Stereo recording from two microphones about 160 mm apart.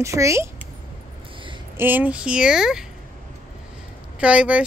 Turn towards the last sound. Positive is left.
turn(degrees=-5)  # may be behind; listen again after turning